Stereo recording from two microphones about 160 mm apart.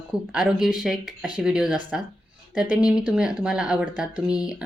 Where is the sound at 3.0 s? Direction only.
5° right (ahead or behind).